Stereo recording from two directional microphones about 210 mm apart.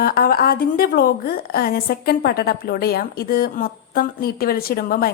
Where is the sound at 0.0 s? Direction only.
45° left (ahead or behind).